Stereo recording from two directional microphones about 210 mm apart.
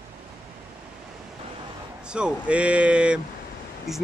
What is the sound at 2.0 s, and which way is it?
Speech, 5° right (ahead or behind).